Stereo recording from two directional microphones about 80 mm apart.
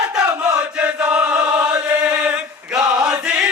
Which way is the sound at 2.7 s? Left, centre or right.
Centre.